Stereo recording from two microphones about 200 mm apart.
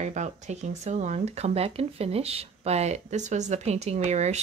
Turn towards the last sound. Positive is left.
turn(degrees=-35)  # may be behind; listen again after turning